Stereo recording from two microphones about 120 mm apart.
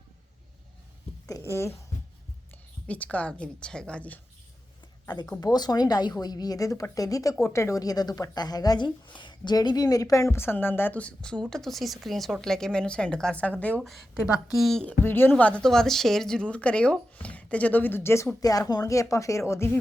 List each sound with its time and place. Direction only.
1.4 s speech: 25° left (ahead or behind)
2.8 s speech: 10° left (ahead or behind)
5.0 s speech: 35° left (ahead or behind); by 13.9 s 10° left (ahead or behind)
14.1 s a woman's voice: centre (ahead or behind)
15.0 s speech: 20° left (ahead or behind)